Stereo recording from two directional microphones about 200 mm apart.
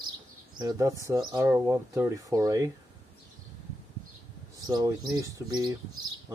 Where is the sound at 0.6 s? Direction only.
15° right (ahead or behind).